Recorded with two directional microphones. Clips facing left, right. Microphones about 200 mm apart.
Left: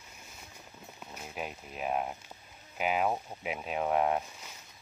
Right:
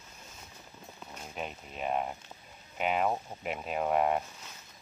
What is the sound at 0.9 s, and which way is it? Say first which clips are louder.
Speech: even; 5° left (ahead or behind).